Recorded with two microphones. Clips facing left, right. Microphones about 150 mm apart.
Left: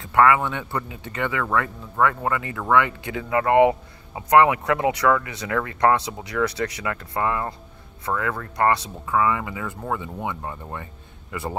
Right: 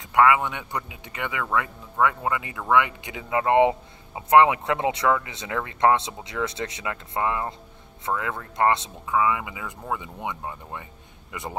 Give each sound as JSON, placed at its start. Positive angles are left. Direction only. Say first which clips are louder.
{"t": 0.0, "sound": "speech", "louder": "left 1 dB", "side_deg": -15}